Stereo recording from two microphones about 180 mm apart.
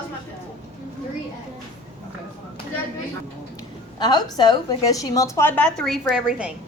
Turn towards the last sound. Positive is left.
turn(degrees=-5)  # may be behind; listen again after turning